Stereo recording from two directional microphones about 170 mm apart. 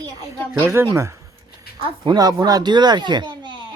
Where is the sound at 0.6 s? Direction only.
15° right (ahead or behind).